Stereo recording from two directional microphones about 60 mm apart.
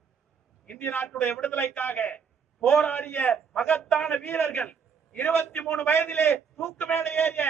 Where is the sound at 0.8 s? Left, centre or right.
Left.